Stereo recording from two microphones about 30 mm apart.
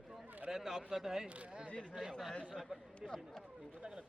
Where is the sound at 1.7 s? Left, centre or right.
Left.